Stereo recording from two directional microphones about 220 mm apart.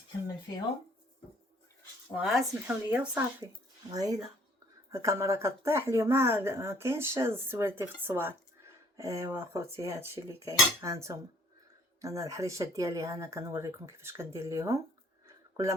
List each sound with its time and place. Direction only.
2.1 s speech: centre (ahead or behind)
3.9 s speech: 15° right (ahead or behind)